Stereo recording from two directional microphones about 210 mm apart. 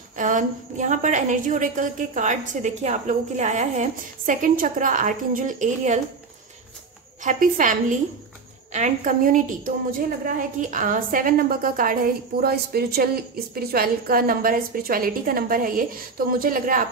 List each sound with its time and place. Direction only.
0.1 s a woman's voice: 35° right (ahead or behind)
7.2 s a woman's voice: 40° right (ahead or behind)
8.7 s a woman's voice: 35° right (ahead or behind)